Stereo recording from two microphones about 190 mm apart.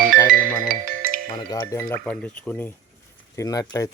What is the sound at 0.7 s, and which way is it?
Music, 50° right (ahead or behind).